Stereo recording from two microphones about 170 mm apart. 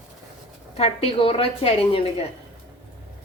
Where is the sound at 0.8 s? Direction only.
35° left (ahead or behind).